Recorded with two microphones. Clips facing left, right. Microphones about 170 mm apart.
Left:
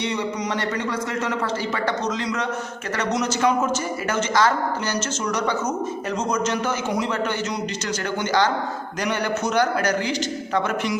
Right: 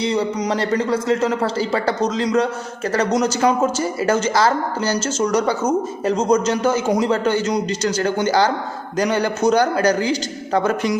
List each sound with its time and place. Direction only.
0.0 s a man's voice: 35° right (ahead or behind)